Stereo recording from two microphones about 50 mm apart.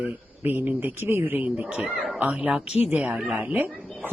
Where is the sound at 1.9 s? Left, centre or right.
Centre.